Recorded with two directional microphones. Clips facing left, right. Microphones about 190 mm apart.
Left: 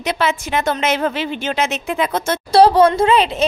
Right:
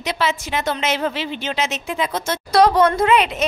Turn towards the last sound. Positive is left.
turn(degrees=30)  # may be behind; listen again after turning